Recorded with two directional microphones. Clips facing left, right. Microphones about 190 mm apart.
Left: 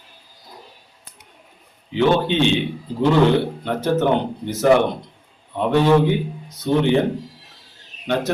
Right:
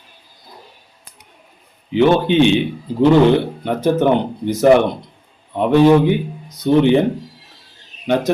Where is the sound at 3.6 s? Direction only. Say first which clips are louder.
Right 4 dB; 15° right (ahead or behind).